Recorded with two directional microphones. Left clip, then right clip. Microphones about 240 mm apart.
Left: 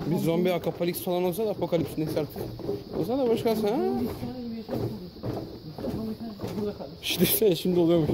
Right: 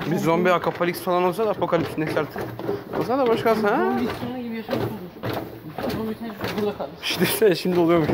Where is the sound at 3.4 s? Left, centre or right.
Centre.